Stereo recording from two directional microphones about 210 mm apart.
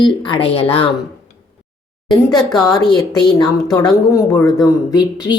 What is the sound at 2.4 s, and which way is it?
Speech, centre (ahead or behind).